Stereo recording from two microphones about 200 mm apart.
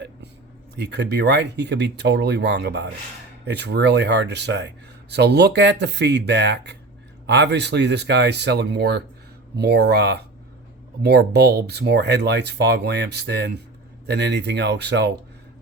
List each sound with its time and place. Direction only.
0.8 s speech: 60° right (ahead or behind)